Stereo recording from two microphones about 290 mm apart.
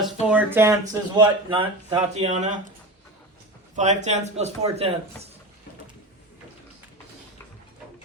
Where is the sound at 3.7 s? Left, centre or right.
Right.